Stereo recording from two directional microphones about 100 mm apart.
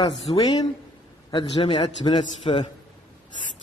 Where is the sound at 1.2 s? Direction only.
60° left (ahead or behind).